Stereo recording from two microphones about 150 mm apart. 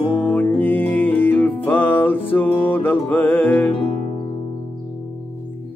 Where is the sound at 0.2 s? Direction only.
15° left (ahead or behind).